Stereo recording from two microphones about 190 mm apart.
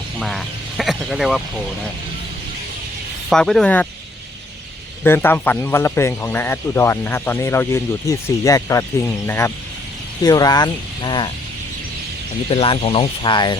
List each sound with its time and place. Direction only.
0.2 s speech: centre (ahead or behind)
3.2 s speech: centre (ahead or behind)
5.0 s speech: 10° left (ahead or behind)
12.5 s speech: 30° left (ahead or behind)